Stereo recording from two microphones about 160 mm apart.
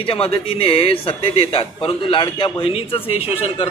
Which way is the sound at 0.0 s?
35° left (ahead or behind).